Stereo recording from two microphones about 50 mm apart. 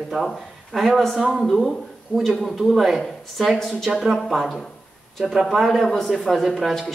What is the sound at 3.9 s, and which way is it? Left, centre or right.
Speech, centre.